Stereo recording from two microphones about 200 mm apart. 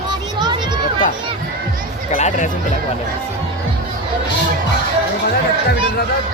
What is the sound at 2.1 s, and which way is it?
Speech, 35° left (ahead or behind).